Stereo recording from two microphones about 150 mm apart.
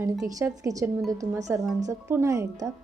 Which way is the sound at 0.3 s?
20° right (ahead or behind).